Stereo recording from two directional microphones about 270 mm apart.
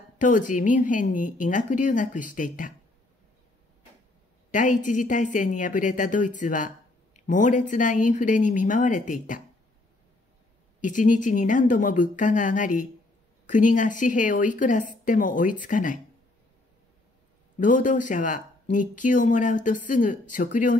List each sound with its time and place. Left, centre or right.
0.2 s speech: left
4.5 s speech: left
10.8 s speech: left
17.6 s speech: left